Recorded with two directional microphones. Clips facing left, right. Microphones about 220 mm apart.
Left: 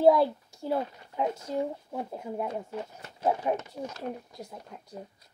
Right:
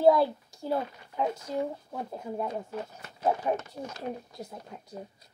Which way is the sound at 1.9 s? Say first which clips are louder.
Left 1 dB; 10° left (ahead or behind).